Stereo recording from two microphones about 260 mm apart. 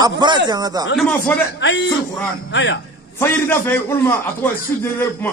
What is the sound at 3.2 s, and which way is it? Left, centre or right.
A man's voice, centre.